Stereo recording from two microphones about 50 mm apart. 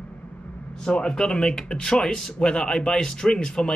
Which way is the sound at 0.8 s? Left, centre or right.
Centre.